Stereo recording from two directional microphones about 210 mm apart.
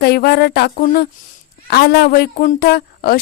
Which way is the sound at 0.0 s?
50° left (ahead or behind).